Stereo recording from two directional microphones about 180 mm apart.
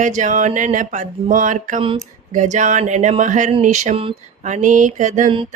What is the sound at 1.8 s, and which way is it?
Speech, 30° right (ahead or behind).